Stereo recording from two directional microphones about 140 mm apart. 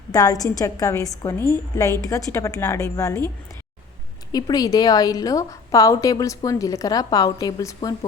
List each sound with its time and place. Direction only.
0.1 s a woman's voice: 25° left (ahead or behind)